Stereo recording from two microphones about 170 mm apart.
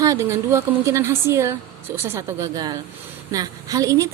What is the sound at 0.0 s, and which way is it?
A woman's voice, 20° right (ahead or behind).